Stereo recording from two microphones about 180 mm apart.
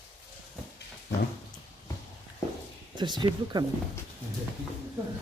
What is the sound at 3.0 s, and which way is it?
Speech, 25° right (ahead or behind).